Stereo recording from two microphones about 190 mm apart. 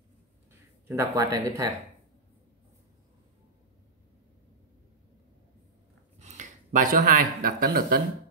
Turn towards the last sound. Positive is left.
turn(degrees=-50)  # may be behind; listen again after turning